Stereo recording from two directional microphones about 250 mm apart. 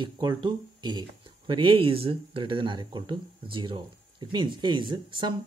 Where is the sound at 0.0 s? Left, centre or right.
Centre.